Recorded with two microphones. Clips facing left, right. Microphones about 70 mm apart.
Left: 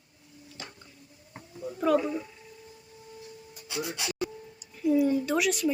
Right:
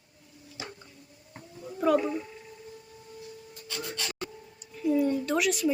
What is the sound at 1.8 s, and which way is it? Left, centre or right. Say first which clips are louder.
Speech: even; centre.